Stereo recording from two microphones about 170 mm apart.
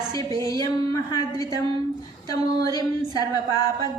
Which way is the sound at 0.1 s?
25° right (ahead or behind).